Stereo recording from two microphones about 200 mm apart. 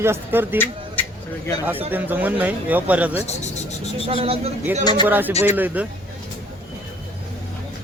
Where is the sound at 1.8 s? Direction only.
10° right (ahead or behind).